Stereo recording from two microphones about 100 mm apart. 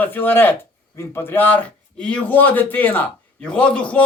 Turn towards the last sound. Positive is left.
turn(degrees=10)  # may be behind; listen again after turning